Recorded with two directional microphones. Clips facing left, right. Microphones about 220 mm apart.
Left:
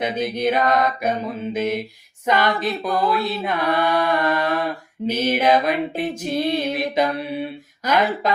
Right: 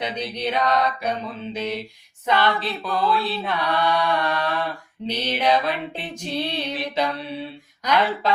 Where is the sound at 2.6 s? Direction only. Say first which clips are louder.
Left 5 dB; 15° left (ahead or behind).